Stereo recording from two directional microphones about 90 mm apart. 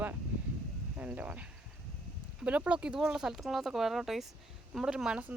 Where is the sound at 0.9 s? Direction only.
20° right (ahead or behind).